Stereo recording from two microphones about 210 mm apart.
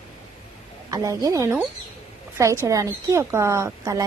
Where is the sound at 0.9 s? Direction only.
15° right (ahead or behind).